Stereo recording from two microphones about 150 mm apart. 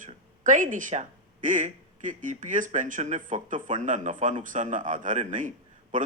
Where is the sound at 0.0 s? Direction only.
60° right (ahead or behind).